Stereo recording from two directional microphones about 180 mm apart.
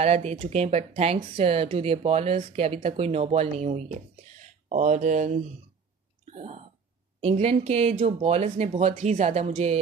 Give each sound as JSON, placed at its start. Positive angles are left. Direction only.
{"t": 0.0, "sound": "speech", "side_deg": -35}